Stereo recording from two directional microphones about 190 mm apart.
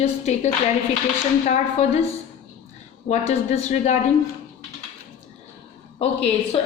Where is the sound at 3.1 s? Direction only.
35° left (ahead or behind).